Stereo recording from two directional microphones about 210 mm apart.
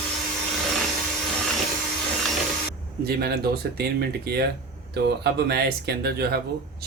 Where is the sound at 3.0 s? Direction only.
50° right (ahead or behind).